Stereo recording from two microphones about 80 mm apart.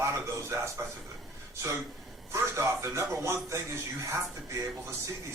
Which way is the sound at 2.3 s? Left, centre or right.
Right.